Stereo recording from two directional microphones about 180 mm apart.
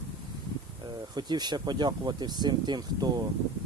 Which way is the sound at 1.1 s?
25° right (ahead or behind).